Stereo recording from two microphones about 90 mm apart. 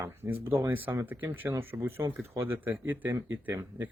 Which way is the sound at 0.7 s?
20° right (ahead or behind).